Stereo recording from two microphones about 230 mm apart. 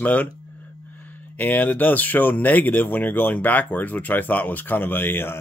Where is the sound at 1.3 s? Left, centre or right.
Centre.